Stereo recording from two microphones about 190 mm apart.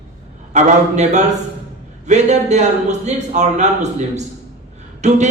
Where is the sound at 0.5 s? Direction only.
40° right (ahead or behind).